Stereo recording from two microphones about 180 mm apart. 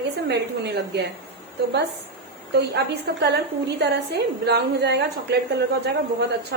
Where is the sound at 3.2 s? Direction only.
65° right (ahead or behind).